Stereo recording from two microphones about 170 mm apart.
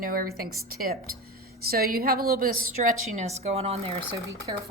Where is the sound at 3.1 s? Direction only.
40° right (ahead or behind).